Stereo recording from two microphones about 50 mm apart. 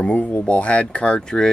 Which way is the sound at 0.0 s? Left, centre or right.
Left.